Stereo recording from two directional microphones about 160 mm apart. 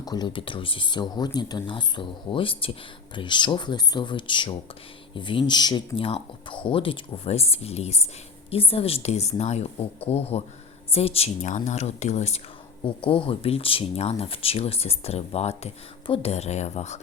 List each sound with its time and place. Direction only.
0.0 s a woman's voice: 25° left (ahead or behind); by 12.4 s 45° left (ahead or behind)
12.8 s speech: 35° left (ahead or behind)